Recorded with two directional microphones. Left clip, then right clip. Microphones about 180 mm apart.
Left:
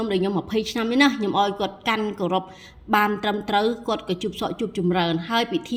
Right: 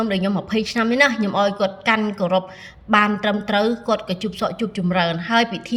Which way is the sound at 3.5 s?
50° left (ahead or behind).